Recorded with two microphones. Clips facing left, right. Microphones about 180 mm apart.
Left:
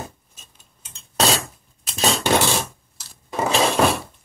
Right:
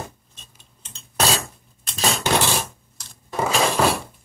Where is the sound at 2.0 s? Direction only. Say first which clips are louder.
Left 2 dB; 25° left (ahead or behind).